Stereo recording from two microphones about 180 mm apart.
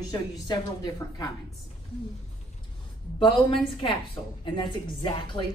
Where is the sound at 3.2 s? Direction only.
30° left (ahead or behind).